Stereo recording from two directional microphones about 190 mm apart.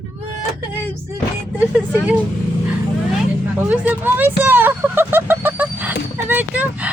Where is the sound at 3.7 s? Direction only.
10° right (ahead or behind).